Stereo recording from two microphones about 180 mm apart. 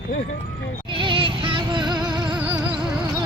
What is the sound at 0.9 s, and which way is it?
Music, 30° right (ahead or behind).